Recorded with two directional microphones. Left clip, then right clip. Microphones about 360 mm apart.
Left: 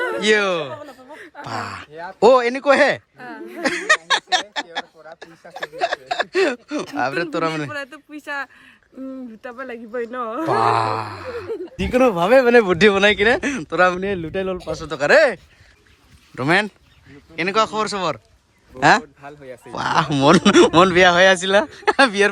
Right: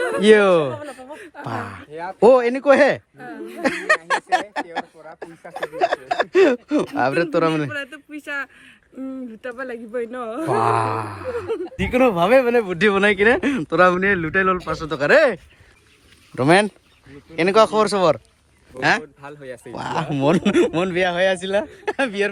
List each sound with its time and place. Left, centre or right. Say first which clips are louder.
0.1 s speech: right 6 dB; centre
3.6 s a sound: left 1 dB; centre
6.9 s a man's voice: right 1 dB; centre
12.5 s speech: left 5 dB; left
12.8 s speech: left 2 dB; centre
19.2 s speech: right 2 dB; centre